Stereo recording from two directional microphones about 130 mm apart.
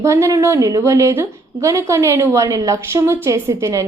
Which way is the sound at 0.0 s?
20° right (ahead or behind).